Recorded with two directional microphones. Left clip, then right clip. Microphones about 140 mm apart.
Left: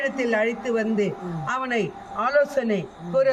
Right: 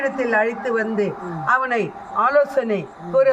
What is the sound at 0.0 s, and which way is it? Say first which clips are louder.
A woman's voice: right 4 dB; 5° left (ahead or behind).